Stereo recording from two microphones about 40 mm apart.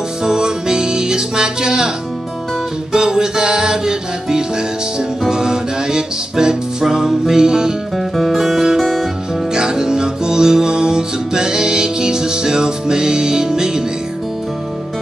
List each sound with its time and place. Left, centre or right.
0.2 s music: centre
2.9 s music: centre
8.0 s guitar: centre
9.5 s music: centre